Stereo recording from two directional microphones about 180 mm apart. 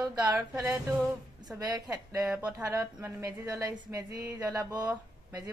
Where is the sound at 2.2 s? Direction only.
5° right (ahead or behind).